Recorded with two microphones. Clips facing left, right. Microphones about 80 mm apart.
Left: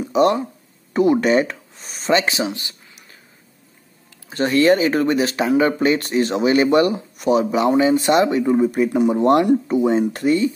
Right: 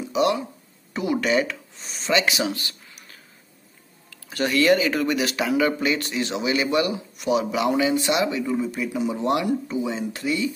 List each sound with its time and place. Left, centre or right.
0.0 s a man's voice: left